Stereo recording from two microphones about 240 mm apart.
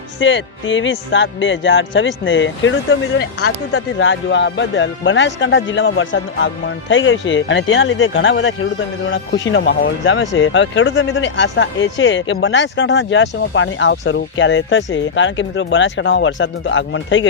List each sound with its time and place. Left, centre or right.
0.2 s speech: left